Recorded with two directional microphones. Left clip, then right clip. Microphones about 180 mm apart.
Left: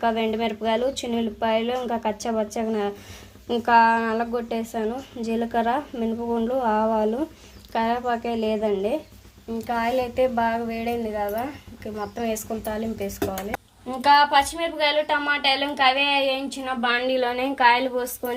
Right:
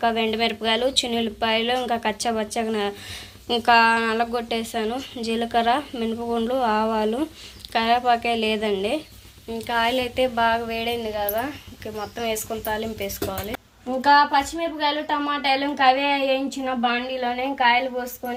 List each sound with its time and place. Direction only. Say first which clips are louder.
0.0 s a woman's voice: right 2 dB; centre (ahead or behind)
14.0 s a woman's voice: even; 30° left (ahead or behind)